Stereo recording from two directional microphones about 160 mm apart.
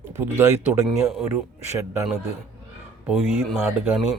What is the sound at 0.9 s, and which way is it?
Speech, centre (ahead or behind).